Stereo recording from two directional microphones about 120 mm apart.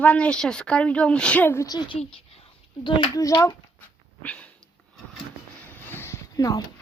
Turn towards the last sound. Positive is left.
turn(degrees=30)  # may be behind; listen again after turning